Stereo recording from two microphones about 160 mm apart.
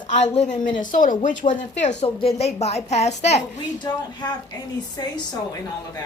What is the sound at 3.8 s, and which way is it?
Speech, 25° left (ahead or behind).